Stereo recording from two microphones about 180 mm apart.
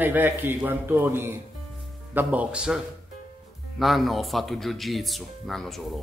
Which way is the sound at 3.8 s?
Centre (ahead or behind).